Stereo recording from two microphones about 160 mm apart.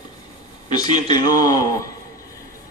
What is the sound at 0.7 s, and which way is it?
A man's voice, 25° left (ahead or behind).